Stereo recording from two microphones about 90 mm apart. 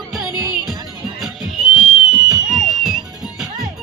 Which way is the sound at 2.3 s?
5° right (ahead or behind).